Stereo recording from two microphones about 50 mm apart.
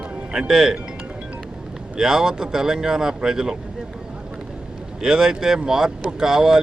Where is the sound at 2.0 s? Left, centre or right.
Centre.